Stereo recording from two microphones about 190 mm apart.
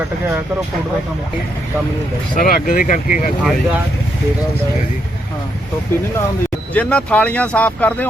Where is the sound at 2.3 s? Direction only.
50° left (ahead or behind).